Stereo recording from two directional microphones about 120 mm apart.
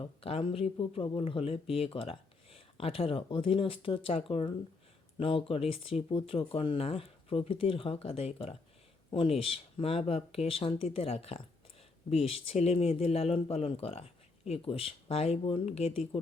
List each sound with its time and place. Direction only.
0.0 s speech: 55° left (ahead or behind)